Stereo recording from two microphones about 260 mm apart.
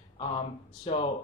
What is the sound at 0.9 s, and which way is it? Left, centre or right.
Speech, left.